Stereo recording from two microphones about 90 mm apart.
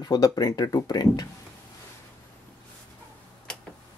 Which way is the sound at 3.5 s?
10° left (ahead or behind).